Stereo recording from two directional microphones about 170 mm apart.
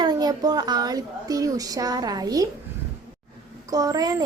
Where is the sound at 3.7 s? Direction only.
20° right (ahead or behind).